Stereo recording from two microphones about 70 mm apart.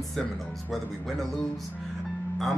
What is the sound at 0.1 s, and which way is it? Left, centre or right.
Speech, centre.